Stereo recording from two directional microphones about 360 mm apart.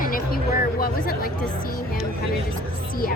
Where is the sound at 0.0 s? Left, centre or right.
Left.